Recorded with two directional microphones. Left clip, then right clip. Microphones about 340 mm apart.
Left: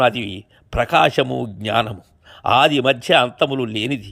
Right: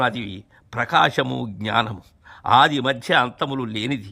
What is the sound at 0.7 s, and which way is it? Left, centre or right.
A man's voice, centre.